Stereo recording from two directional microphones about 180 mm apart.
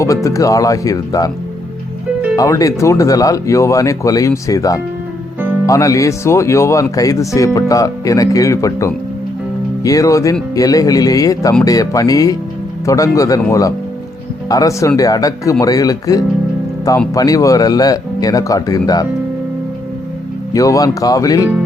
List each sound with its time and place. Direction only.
0.0 s speech: 15° left (ahead or behind)
2.3 s speech: 20° left (ahead or behind)
20.5 s speech: 20° left (ahead or behind)